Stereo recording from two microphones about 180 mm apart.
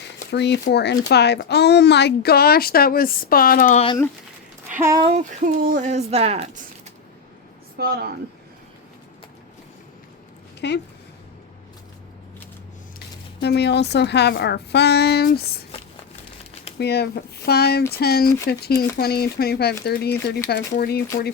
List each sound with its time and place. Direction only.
0.3 s speech: 70° left (ahead or behind); by 3.8 s 50° left (ahead or behind)
4.7 s speech: 15° right (ahead or behind)
5.6 s speech: 45° right (ahead or behind)
7.8 s speech: 65° right (ahead or behind)
10.6 s speech: 70° left (ahead or behind)
13.4 s speech: 70° left (ahead or behind)
16.7 s speech: 65° left (ahead or behind)